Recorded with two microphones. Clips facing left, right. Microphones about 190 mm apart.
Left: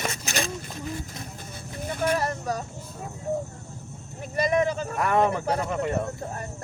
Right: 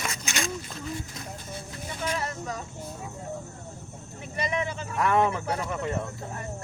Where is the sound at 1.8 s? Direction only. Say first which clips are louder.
Left 7 dB; 55° left (ahead or behind); by 2.6 s 40° left (ahead or behind).